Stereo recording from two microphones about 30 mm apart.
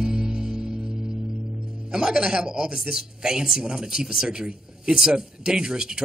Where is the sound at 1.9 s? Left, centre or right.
Right.